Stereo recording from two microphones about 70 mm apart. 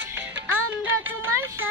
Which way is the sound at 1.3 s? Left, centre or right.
Right.